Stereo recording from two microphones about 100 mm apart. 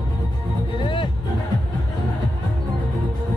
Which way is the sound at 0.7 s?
55° left (ahead or behind).